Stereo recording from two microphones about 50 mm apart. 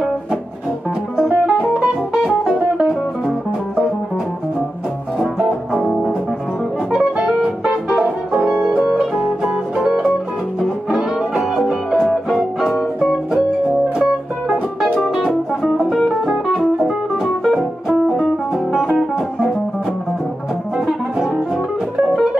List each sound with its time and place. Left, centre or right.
1.1 s music: centre
5.2 s music: centre
7.2 s music: centre
15.6 s music: centre
20.7 s music: centre